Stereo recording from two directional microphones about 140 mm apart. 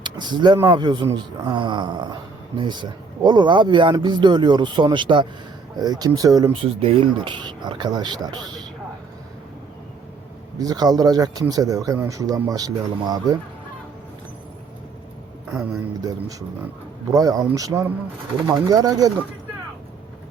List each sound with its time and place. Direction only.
0.0 s speech: 30° right (ahead or behind)
6.5 s speech: 40° right (ahead or behind)
10.6 s speech: 25° right (ahead or behind)
15.4 s speech: 5° right (ahead or behind)
17.1 s speech: 25° right (ahead or behind)